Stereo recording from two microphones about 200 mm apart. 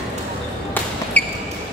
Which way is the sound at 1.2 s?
5° left (ahead or behind).